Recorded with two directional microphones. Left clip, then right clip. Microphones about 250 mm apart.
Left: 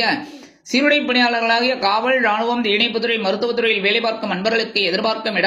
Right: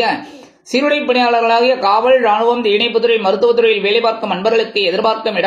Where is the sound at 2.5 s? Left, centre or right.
Left.